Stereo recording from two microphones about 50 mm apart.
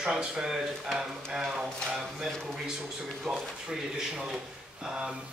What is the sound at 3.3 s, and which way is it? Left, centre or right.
Speech, centre.